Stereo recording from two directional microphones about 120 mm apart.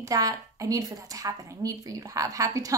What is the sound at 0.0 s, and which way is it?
A woman's voice, 30° right (ahead or behind).